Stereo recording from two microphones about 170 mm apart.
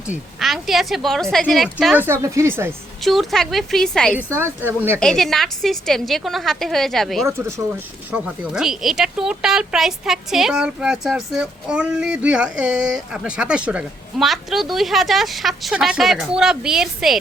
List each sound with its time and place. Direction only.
0.1 s speech: centre (ahead or behind)
2.0 s speech: 15° right (ahead or behind)
3.0 s speech: centre (ahead or behind)
4.2 s speech: 10° right (ahead or behind)
4.9 s speech: 5° left (ahead or behind)
7.3 s speech: 15° right (ahead or behind)
8.1 s speech: 5° right (ahead or behind)